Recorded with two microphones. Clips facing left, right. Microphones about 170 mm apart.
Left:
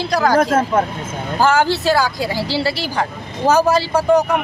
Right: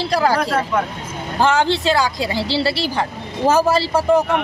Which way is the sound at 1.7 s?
20° right (ahead or behind).